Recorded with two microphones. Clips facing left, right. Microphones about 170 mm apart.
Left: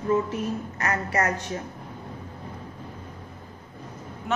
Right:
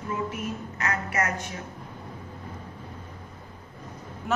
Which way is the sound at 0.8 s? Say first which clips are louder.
Left 2 dB; 35° left (ahead or behind).